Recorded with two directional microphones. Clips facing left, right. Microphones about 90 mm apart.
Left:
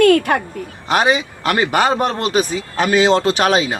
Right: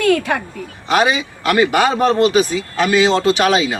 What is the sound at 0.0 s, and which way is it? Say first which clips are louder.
Speech: left 4 dB; 55° left (ahead or behind).